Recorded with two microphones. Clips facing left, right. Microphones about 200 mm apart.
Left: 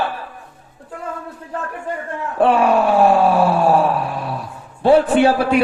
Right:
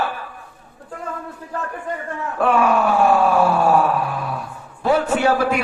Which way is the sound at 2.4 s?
30° left (ahead or behind).